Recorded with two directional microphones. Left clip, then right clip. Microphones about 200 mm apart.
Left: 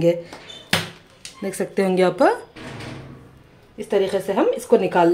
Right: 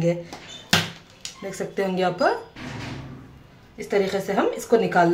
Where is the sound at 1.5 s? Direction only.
40° left (ahead or behind).